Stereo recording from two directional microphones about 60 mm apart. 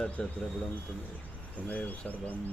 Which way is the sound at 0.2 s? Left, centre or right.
Centre.